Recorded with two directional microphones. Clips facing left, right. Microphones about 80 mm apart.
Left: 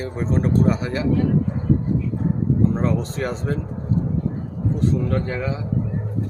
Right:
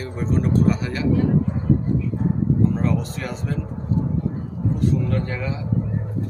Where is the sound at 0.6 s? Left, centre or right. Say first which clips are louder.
Left 1 dB; left.